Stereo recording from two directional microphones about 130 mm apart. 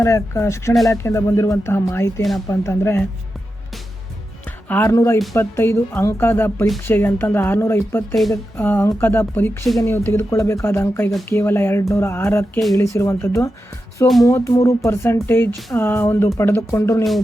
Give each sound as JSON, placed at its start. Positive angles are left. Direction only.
{"t": 0.0, "sound": "speech", "side_deg": 25}
{"t": 4.4, "sound": "speech", "side_deg": 15}